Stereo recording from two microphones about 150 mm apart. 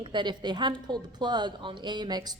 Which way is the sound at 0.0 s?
30° right (ahead or behind).